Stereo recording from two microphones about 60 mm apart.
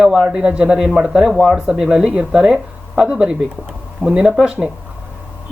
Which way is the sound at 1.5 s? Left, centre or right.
Centre.